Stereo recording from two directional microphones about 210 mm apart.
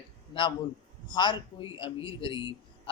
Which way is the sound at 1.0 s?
20° left (ahead or behind).